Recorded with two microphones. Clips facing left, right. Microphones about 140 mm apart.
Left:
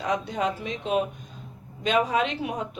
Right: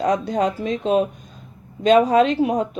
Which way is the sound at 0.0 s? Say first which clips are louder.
Right 7 dB; 40° right (ahead or behind).